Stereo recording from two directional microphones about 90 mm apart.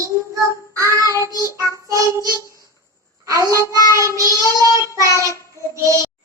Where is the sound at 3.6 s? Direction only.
40° left (ahead or behind).